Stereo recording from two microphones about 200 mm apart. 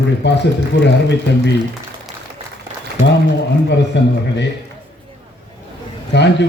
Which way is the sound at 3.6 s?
60° left (ahead or behind).